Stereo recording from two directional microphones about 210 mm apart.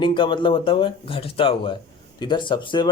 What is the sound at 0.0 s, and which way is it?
Speech, 20° left (ahead or behind).